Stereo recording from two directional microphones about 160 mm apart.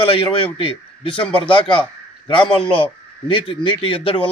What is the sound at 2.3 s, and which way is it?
A man's voice, 35° left (ahead or behind).